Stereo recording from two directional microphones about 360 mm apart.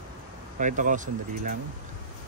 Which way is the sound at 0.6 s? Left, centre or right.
Right.